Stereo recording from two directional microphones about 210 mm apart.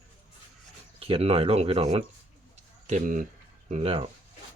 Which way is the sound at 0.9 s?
25° right (ahead or behind).